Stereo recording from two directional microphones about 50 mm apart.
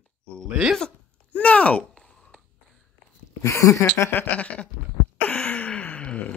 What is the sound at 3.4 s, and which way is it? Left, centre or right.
Speech, left.